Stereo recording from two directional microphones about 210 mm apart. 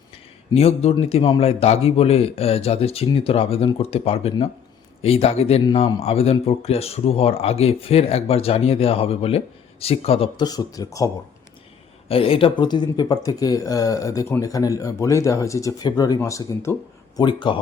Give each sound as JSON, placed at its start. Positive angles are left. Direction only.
{"t": 0.5, "sound": "speech", "side_deg": 30}
{"t": 12.0, "sound": "speech", "side_deg": 25}